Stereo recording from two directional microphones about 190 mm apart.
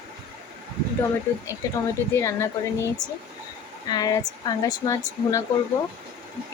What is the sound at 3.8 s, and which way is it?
A woman's voice, 20° left (ahead or behind).